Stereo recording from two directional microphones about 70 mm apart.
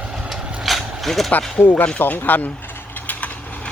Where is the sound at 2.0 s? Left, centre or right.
Left.